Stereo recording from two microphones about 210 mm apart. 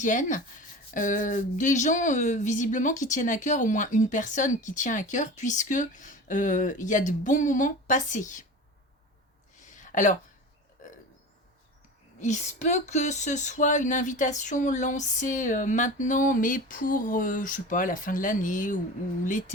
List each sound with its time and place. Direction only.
0.0 s speech: 35° left (ahead or behind)
9.6 s a sound: 35° left (ahead or behind)
12.2 s speech: 35° left (ahead or behind)